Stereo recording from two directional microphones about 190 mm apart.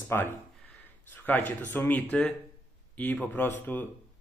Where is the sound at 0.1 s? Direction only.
10° left (ahead or behind).